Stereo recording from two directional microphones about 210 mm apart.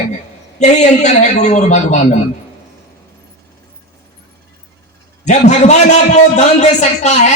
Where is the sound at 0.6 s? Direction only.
35° left (ahead or behind).